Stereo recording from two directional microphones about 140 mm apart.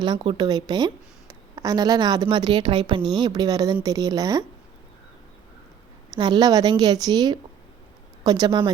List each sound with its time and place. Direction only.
0.0 s a woman's voice: 35° right (ahead or behind)
6.1 s a woman's voice: 30° right (ahead or behind)